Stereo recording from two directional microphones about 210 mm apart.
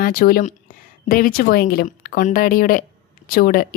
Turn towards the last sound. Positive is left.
turn(degrees=45)  # may be behind; listen again after turning